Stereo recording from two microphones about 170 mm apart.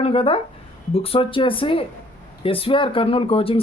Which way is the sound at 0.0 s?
30° left (ahead or behind).